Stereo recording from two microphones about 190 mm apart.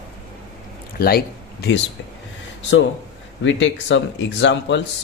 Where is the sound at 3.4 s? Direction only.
80° left.